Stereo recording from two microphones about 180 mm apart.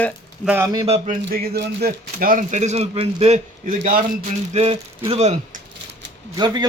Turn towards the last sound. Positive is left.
turn(degrees=-25)  # may be behind; listen again after turning